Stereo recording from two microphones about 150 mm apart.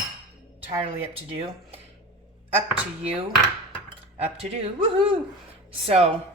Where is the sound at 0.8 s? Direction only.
40° right (ahead or behind).